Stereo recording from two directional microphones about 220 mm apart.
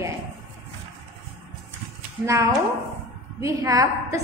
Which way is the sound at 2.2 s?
15° right (ahead or behind).